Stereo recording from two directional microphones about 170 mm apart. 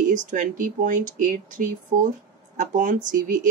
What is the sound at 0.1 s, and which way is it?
A woman's voice, 50° right (ahead or behind).